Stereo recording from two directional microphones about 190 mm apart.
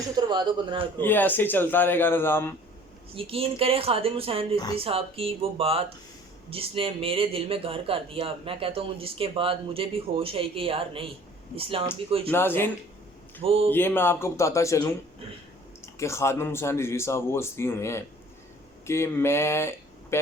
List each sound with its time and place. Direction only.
0.2 s a man's voice: 25° right (ahead or behind)
0.9 s speech: 10° left (ahead or behind)
3.2 s a man's voice: 30° right (ahead or behind)
12.3 s speech: 10° left (ahead or behind)
13.4 s a man's voice: 30° right (ahead or behind)
13.7 s speech: 10° left (ahead or behind)